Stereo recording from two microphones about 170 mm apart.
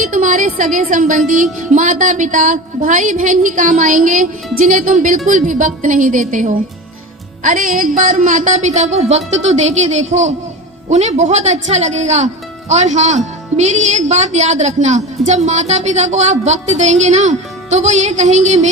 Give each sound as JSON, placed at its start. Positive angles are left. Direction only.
{"t": 0.0, "sound": "speech", "side_deg": -50}